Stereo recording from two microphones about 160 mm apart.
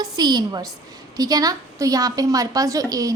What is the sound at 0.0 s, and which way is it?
A woman's voice, 25° right (ahead or behind).